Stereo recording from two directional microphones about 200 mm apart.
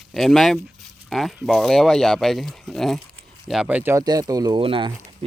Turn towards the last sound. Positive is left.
turn(degrees=-25)  # may be behind; listen again after turning